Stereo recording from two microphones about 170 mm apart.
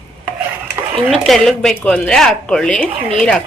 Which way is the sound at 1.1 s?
Centre (ahead or behind).